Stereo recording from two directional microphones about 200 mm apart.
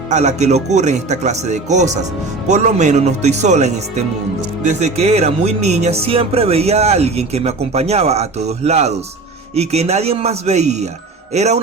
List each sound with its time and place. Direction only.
0.1 s speech: 35° right (ahead or behind)